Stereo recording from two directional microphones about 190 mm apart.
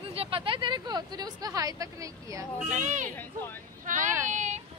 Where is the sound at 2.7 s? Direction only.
40° right (ahead or behind).